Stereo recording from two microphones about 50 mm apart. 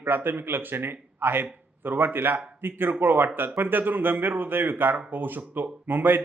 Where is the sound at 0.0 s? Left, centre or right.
Right.